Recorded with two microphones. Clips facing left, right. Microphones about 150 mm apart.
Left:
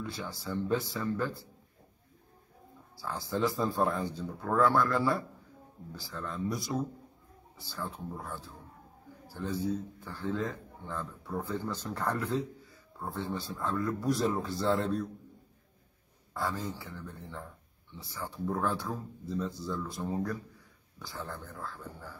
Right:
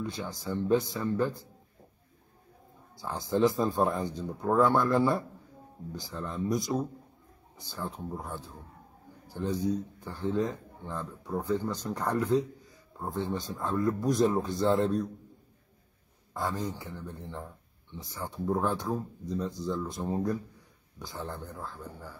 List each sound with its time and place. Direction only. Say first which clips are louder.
0.0 s speech: right 3 dB; 20° right (ahead or behind)
3.0 s speech: right 5 dB; 20° right (ahead or behind)
16.3 s speech: right 2 dB; 20° right (ahead or behind)